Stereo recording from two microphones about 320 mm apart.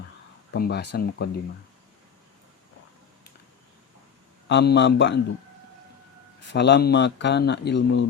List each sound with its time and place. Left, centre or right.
0.5 s speech: left
4.4 s speech: left
6.5 s speech: left